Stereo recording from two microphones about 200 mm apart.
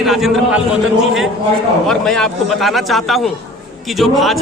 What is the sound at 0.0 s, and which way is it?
Speech, centre (ahead or behind).